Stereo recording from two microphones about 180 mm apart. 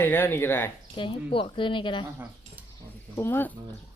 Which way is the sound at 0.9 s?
30° left (ahead or behind).